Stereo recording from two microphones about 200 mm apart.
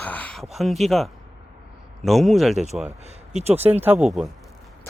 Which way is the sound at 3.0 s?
30° right (ahead or behind).